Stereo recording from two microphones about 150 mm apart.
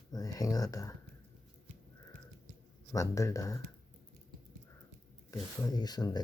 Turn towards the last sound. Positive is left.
turn(degrees=25)  # may be behind; listen again after turning